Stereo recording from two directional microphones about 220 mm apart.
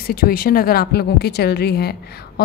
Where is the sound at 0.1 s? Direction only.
40° left (ahead or behind).